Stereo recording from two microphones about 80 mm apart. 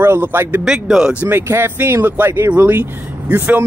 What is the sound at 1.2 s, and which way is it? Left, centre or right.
Speech, right.